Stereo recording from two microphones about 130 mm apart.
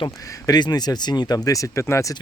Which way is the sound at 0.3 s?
30° left (ahead or behind).